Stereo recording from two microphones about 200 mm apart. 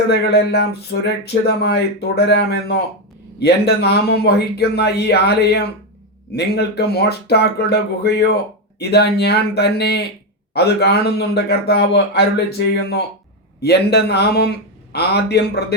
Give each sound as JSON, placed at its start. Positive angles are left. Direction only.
{"t": 0.1, "sound": "speech", "side_deg": 55}